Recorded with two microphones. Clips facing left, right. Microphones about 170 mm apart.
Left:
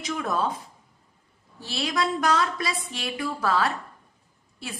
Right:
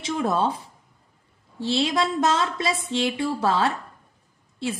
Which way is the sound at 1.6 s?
25° right (ahead or behind).